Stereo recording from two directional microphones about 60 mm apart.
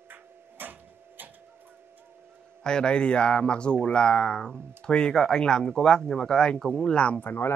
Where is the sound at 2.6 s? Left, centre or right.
Centre.